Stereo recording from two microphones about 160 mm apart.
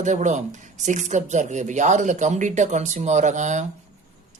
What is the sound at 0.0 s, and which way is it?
Speech, 50° right (ahead or behind).